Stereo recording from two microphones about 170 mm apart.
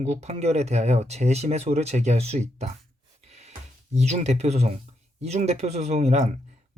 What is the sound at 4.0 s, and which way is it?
Speech, 40° right (ahead or behind).